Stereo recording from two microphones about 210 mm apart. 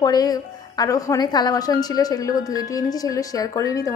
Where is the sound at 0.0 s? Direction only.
15° left (ahead or behind).